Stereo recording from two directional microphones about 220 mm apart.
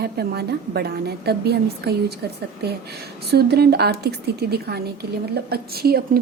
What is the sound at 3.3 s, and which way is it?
A woman's voice, 45° right (ahead or behind).